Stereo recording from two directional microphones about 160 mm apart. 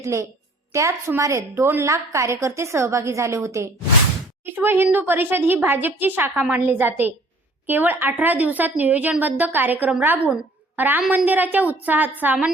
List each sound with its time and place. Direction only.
0.0 s a woman's voice: 20° right (ahead or behind)